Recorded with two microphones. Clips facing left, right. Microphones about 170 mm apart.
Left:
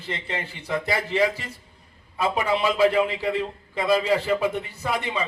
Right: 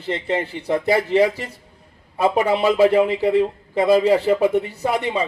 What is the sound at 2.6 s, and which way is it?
A man's voice, 30° right (ahead or behind).